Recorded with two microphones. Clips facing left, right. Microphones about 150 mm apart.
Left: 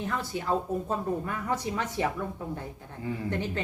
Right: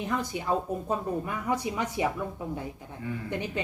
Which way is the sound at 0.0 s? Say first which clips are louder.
Right 1 dB; 15° right (ahead or behind).